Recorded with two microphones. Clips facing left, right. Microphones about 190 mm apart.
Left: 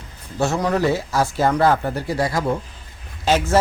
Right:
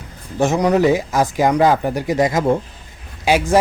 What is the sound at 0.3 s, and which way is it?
A man's voice, 15° right (ahead or behind).